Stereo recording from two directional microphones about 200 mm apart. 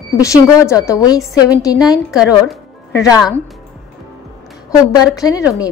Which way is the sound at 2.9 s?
20° left (ahead or behind).